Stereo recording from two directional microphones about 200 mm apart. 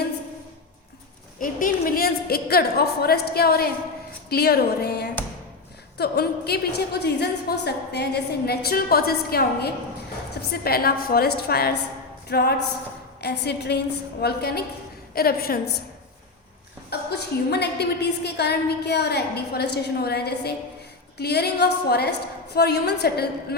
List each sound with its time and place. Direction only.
1.4 s a woman's voice: 45° left (ahead or behind)
16.9 s a woman's voice: 55° left (ahead or behind)